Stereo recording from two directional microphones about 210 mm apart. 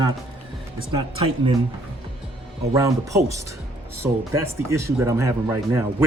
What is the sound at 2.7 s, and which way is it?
Speech, 15° right (ahead or behind).